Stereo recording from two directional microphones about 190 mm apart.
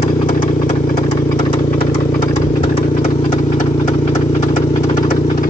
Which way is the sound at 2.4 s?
30° left (ahead or behind).